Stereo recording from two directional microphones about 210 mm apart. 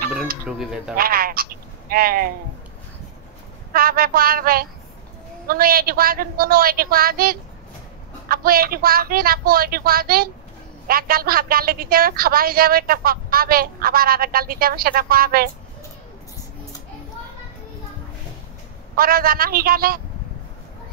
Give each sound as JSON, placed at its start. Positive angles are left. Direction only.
{"t": 0.5, "sound": "speech", "side_deg": -5}
{"t": 0.9, "sound": "a sound", "side_deg": -45}
{"t": 3.7, "sound": "speech", "side_deg": -45}
{"t": 18.9, "sound": "speech", "side_deg": -45}